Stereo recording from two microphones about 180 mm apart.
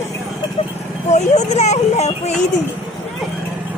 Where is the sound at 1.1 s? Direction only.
40° left (ahead or behind).